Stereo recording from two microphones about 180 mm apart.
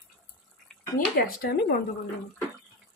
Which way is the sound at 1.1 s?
60° left (ahead or behind).